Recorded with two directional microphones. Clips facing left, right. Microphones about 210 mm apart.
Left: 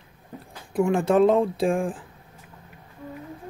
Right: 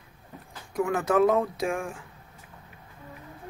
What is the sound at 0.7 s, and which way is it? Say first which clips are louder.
Speech: left 4 dB; 30° left (ahead or behind).